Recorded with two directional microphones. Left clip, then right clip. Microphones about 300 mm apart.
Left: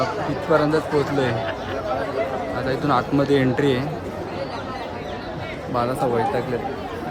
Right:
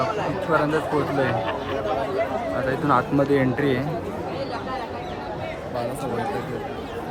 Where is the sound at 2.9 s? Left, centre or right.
Centre.